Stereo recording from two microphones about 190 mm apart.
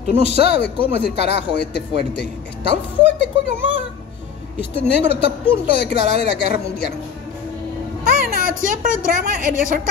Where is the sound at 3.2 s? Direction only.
60° left (ahead or behind).